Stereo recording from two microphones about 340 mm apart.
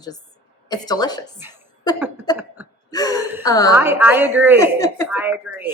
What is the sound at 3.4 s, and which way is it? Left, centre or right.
Speech, centre.